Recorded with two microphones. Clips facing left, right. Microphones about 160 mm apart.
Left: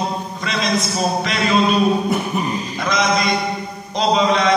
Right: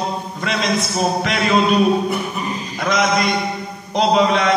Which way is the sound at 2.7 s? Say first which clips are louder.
Right 2 dB; 55° right (ahead or behind).